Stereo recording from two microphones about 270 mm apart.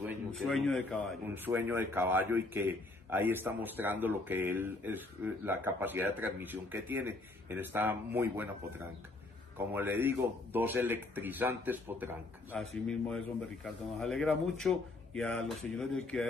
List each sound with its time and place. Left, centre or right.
0.0 s a man's voice: centre
1.2 s a man's voice: centre
13.9 s speech: centre